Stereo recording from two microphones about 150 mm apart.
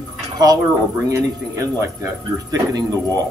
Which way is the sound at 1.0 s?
25° right (ahead or behind).